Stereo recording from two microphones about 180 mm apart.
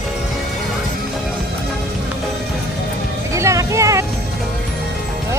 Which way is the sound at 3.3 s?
15° right (ahead or behind).